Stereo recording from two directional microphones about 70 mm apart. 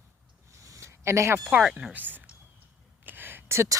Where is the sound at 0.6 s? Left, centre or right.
Right.